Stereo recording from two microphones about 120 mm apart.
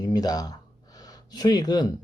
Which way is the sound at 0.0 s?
35° left (ahead or behind).